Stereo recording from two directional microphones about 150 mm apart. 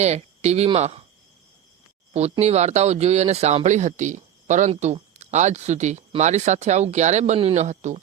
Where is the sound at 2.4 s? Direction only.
45° right (ahead or behind).